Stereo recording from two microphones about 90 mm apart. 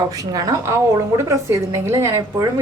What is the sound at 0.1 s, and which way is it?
A woman's voice, 40° right (ahead or behind).